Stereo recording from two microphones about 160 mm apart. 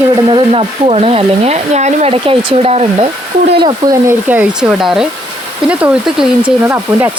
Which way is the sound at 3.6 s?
25° right (ahead or behind).